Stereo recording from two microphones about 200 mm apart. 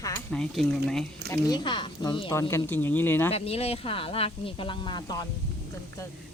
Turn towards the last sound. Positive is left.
turn(degrees=20)  # may be behind; listen again after turning